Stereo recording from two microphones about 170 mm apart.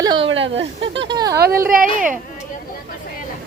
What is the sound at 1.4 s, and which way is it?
Speech, 60° right (ahead or behind).